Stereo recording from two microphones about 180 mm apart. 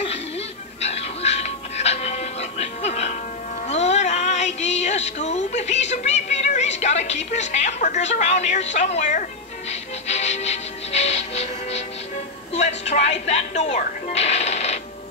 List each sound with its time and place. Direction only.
0.8 s music: 35° left (ahead or behind)
8.7 s speech: 40° left (ahead or behind)
9.7 s music: 40° left (ahead or behind)
12.5 s speech: 40° left (ahead or behind)